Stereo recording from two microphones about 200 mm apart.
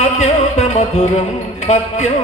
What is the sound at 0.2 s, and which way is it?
Music, 35° left (ahead or behind).